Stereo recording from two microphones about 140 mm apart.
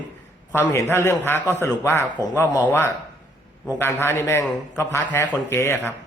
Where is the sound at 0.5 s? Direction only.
15° left (ahead or behind).